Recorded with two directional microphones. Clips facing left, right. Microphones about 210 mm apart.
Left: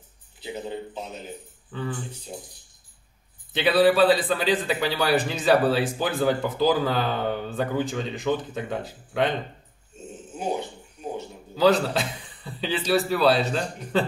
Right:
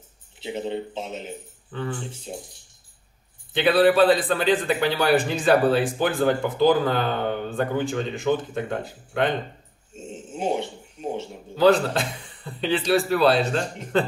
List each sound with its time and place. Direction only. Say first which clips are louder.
0.4 s a man's voice: right 4 dB; 25° right (ahead or behind)
1.7 s speech: right 1 dB; 5° left (ahead or behind)
3.5 s a man's voice: right 1 dB; centre (ahead or behind)
9.9 s a sound: right 4 dB; 25° right (ahead or behind)
11.5 s a man's voice: right 2 dB; centre (ahead or behind)